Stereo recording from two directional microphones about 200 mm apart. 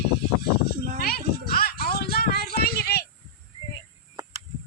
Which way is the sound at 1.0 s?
50° left (ahead or behind).